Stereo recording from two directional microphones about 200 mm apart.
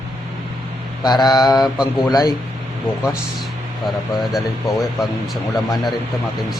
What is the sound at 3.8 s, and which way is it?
Speech, centre (ahead or behind).